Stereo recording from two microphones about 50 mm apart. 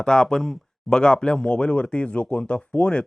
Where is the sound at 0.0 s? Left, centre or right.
Centre.